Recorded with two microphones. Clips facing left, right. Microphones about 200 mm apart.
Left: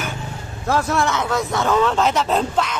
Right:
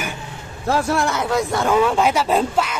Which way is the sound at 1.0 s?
10° right (ahead or behind).